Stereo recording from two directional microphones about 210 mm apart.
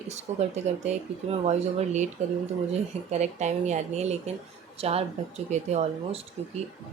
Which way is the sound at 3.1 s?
30° right (ahead or behind).